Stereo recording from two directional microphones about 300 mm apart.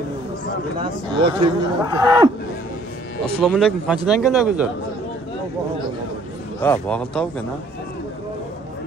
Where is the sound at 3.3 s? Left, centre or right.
Centre.